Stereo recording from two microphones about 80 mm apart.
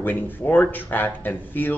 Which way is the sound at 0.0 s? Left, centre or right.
Left.